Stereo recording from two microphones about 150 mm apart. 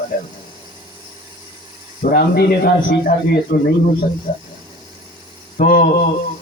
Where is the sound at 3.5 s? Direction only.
90° left.